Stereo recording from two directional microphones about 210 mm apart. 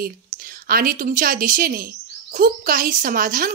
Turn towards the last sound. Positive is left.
turn(degrees=-45)  # may be behind; listen again after turning